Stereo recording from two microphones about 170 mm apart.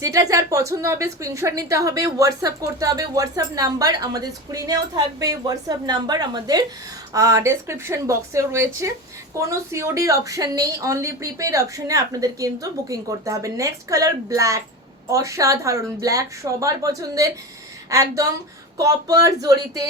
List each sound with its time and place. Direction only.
0.0 s a woman's voice: 20° right (ahead or behind)